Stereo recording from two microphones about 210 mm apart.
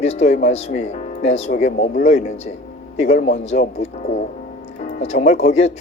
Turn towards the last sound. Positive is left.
turn(degrees=30)  # may be behind; listen again after turning